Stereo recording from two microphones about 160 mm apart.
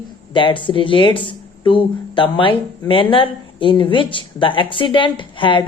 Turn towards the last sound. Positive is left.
turn(degrees=30)  # may be behind; listen again after turning